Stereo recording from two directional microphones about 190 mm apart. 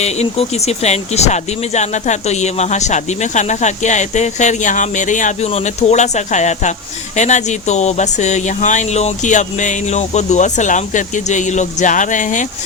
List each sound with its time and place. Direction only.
0.0 s speech: 35° left (ahead or behind)